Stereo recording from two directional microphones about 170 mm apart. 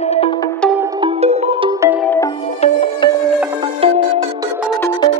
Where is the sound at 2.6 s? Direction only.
35° left (ahead or behind).